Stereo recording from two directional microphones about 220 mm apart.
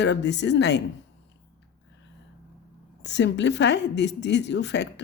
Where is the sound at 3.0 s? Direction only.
50° left (ahead or behind).